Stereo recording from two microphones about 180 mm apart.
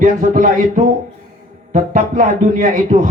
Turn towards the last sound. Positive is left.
turn(degrees=-45)  # may be behind; listen again after turning